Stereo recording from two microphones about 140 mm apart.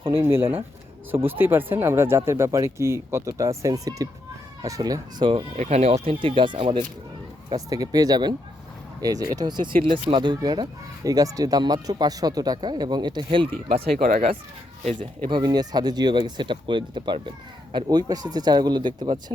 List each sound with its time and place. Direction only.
0.1 s speech: 15° right (ahead or behind)
5.3 s speech: 50° right (ahead or behind)
7.5 s speech: 25° right (ahead or behind)
14.8 s speech: 65° right (ahead or behind)
15.3 s speech: 30° right (ahead or behind)